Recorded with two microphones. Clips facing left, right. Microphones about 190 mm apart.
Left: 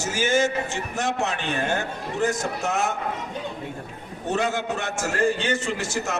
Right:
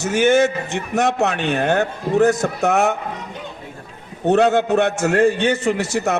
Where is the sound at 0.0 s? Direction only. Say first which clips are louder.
Right 7 dB; 60° right (ahead or behind).